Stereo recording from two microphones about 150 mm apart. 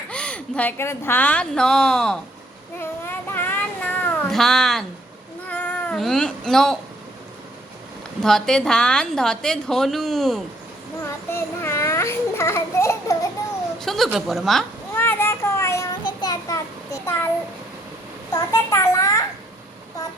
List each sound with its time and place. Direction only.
0.1 s a woman's voice: 5° left (ahead or behind)
2.8 s music: 15° left (ahead or behind)
5.5 s cat: 10° left (ahead or behind)
6.0 s a woman's voice: 5° left (ahead or behind)
8.2 s a woman's voice: 5° left (ahead or behind)
11.3 s a sound: 15° left (ahead or behind)
13.7 s speech: centre (ahead or behind)
14.9 s a sound: 15° left (ahead or behind)
18.3 s a child's voice: 25° left (ahead or behind)